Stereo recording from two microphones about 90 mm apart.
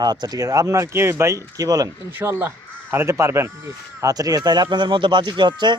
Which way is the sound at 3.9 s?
45° right (ahead or behind).